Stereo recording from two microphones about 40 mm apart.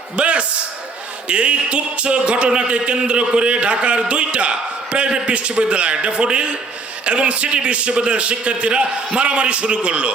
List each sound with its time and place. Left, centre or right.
0.2 s a man's voice: right